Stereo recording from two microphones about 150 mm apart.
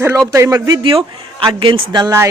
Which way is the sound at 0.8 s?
35° right (ahead or behind).